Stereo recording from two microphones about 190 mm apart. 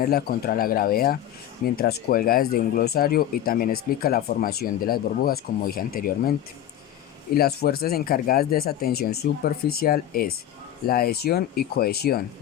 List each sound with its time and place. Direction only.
0.0 s speech: 50° left (ahead or behind)
7.3 s speech: 55° left (ahead or behind)